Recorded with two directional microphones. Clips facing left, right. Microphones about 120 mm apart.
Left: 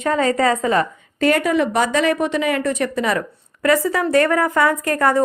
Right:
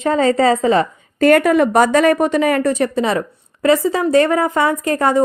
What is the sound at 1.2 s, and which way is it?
A woman's voice, 55° right (ahead or behind).